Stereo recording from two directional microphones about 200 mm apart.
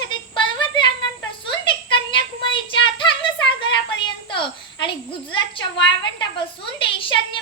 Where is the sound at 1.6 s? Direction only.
25° left (ahead or behind).